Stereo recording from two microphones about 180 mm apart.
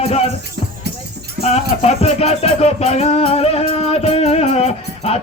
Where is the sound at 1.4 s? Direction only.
35° left (ahead or behind).